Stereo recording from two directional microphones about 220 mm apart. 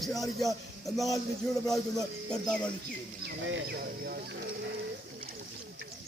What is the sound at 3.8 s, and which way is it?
Speech, 45° right (ahead or behind).